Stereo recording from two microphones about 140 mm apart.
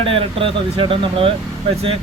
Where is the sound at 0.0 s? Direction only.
40° right (ahead or behind).